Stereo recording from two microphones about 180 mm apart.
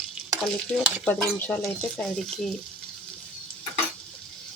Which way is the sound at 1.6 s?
5° left (ahead or behind).